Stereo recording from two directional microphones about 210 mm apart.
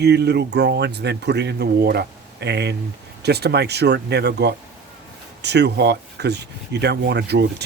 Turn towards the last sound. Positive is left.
turn(degrees=-50)  # may be behind; listen again after turning